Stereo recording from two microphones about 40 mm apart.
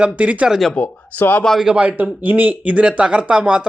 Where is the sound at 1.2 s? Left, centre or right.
Left.